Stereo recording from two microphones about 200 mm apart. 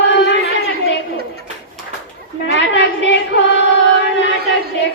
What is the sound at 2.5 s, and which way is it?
Chant, 65° left (ahead or behind).